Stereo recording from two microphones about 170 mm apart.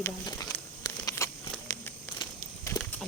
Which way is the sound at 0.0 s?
20° left (ahead or behind).